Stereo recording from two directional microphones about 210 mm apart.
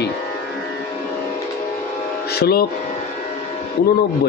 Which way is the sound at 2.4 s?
50° left (ahead or behind).